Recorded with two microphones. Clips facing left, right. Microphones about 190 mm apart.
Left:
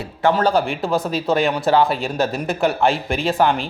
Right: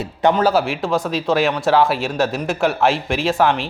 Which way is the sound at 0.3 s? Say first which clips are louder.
Right 1 dB; 5° right (ahead or behind).